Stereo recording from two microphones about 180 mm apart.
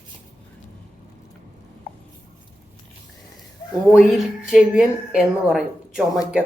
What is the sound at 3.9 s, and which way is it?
A woman's voice, centre (ahead or behind).